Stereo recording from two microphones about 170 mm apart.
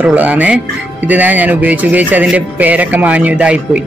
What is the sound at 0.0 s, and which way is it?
Speech, 10° right (ahead or behind).